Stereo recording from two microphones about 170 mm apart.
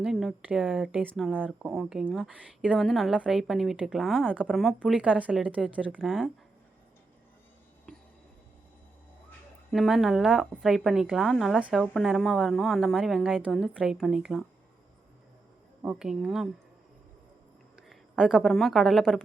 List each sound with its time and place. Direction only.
0.0 s a woman's voice: centre (ahead or behind)
7.9 s a sound: 5° left (ahead or behind)
9.7 s a woman's voice: centre (ahead or behind)
15.8 s a woman's voice: 5° right (ahead or behind)
17.8 s a woman's voice: 5° right (ahead or behind)